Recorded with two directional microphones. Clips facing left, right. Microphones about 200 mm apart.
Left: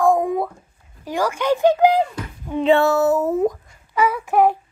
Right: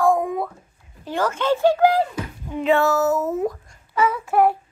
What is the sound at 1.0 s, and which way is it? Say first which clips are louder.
Speech: left 1 dB; 10° left (ahead or behind).